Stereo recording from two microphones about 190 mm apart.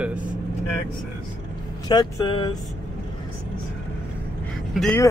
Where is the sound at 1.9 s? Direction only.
25° left (ahead or behind).